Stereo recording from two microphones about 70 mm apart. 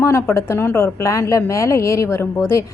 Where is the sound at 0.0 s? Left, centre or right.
Left.